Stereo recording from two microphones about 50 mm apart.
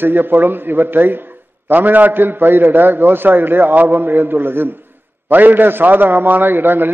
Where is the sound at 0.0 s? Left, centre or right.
Right.